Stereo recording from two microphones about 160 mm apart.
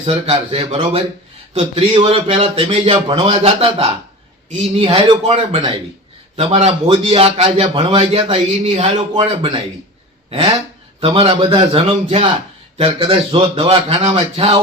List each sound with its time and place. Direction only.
0.0 s a man's voice: 35° right (ahead or behind)
11.0 s a man's voice: 35° right (ahead or behind)